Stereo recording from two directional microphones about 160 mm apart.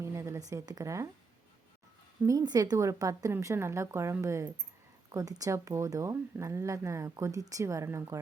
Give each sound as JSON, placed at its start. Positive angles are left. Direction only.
{"t": 0.0, "sound": "a woman's voice", "side_deg": -15}
{"t": 2.2, "sound": "a woman's voice", "side_deg": -25}